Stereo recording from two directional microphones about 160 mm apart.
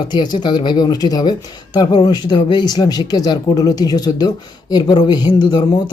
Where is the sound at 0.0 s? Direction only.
30° left (ahead or behind).